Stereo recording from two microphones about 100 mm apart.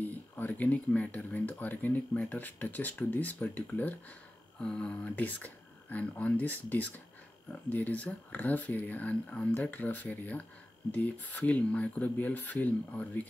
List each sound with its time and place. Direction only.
0.4 s speech: 15° left (ahead or behind)